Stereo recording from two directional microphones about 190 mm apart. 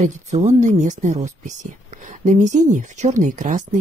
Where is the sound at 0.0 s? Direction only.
35° right (ahead or behind).